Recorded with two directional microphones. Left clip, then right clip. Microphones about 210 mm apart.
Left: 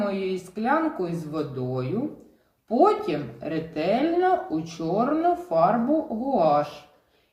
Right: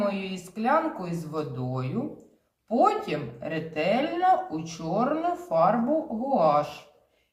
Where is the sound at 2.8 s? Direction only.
35° right (ahead or behind).